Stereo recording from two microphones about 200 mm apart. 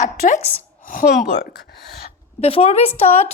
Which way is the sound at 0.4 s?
40° left (ahead or behind).